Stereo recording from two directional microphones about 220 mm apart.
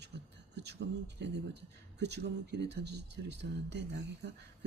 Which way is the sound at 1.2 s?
50° right (ahead or behind).